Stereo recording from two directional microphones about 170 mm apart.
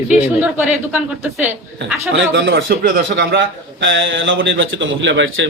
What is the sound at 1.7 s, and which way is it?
A man's voice, 90° right.